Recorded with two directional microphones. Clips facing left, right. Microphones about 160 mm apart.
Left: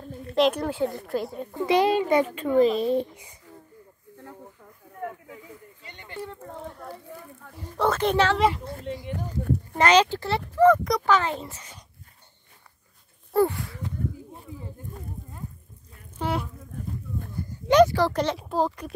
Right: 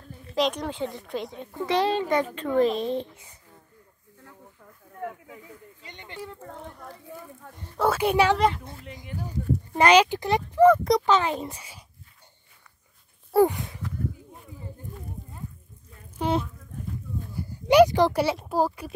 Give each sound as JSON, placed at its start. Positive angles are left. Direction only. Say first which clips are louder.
{"t": 0.3, "sound": "a woman's voice", "louder": "left 4 dB", "side_deg": 5}
{"t": 5.9, "sound": "a sound", "louder": "right 1 dB", "side_deg": -20}
{"t": 6.5, "sound": "speech", "louder": "left 3 dB", "side_deg": 5}
{"t": 9.8, "sound": "speech", "louder": "right 1 dB", "side_deg": -15}
{"t": 10.8, "sound": "speech", "louder": "right 2 dB", "side_deg": -25}
{"t": 13.3, "sound": "speech", "louder": "right 2 dB", "side_deg": -15}
{"t": 16.2, "sound": "speech", "louder": "right 3 dB", "side_deg": -20}
{"t": 17.4, "sound": "speech", "louder": "right 1 dB", "side_deg": -10}